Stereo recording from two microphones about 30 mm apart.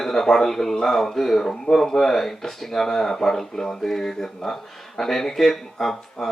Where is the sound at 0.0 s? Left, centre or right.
Centre.